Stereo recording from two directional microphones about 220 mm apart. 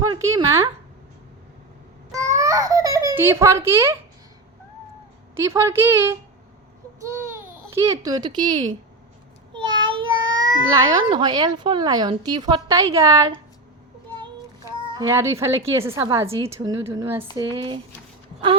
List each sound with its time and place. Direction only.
0.0 s a woman's voice: 15° right (ahead or behind)
2.1 s babbling: 15° right (ahead or behind)
5.4 s a woman's voice: 15° right (ahead or behind)
7.3 s a child's voice: 15° right (ahead or behind)
9.5 s child singing: 20° right (ahead or behind)
10.0 s child singing: 65° right (ahead or behind)
10.4 s speech: 20° right (ahead or behind)
14.9 s a woman's voice: 15° right (ahead or behind)